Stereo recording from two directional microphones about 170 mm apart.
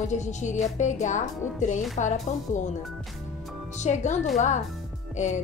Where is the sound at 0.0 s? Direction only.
45° left (ahead or behind).